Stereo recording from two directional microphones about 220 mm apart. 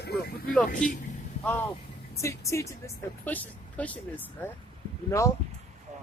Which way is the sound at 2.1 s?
15° left (ahead or behind).